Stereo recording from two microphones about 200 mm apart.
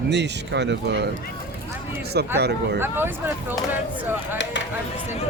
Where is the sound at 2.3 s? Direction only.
55° right (ahead or behind).